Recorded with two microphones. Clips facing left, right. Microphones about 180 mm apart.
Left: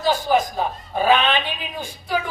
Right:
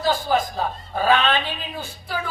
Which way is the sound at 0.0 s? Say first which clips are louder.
Left 2 dB; 15° left (ahead or behind).